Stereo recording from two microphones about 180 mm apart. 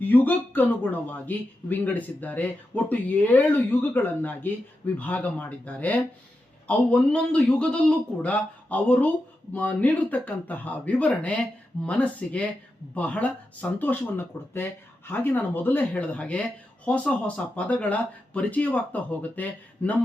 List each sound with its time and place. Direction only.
0.0 s a man's voice: 10° left (ahead or behind)